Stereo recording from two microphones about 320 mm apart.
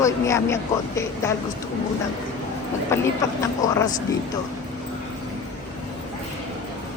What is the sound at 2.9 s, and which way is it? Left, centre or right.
Speech, centre.